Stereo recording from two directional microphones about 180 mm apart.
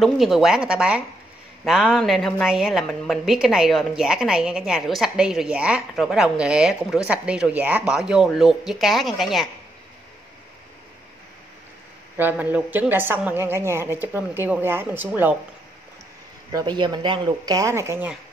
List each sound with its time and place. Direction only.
0.0 s a woman's voice: centre (ahead or behind)
12.2 s a woman's voice: 10° right (ahead or behind)
16.5 s speech: 25° right (ahead or behind)